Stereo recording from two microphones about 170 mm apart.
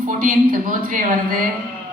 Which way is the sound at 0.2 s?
50° right (ahead or behind).